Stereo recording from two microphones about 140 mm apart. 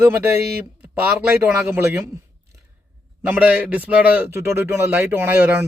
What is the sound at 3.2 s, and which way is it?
A man's voice, 10° right (ahead or behind).